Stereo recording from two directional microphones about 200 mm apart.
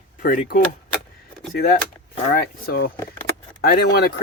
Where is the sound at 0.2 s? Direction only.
45° left (ahead or behind).